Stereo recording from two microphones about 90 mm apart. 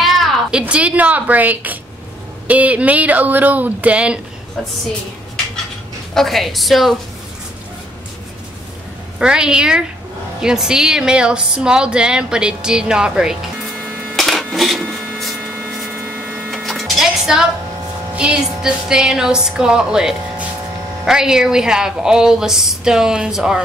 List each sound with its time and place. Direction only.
0.0 s speech: centre (ahead or behind)
6.1 s a woman's voice: centre (ahead or behind)
9.2 s speech: 10° right (ahead or behind)
13.8 s printer: 15° right (ahead or behind)
14.1 s printer: centre (ahead or behind)
15.9 s printer: 15° right (ahead or behind)
16.4 s music: centre (ahead or behind)
18.1 s speech: 10° right (ahead or behind)